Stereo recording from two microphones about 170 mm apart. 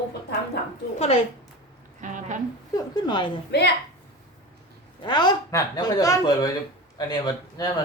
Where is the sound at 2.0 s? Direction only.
50° right (ahead or behind).